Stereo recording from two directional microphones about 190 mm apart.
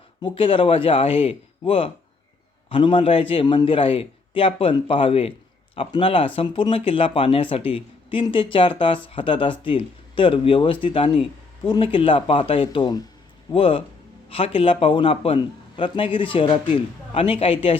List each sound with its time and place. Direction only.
0.2 s speech: 25° left (ahead or behind)